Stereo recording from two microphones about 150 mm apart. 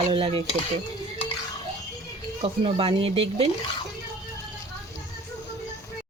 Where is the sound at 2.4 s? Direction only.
35° right (ahead or behind).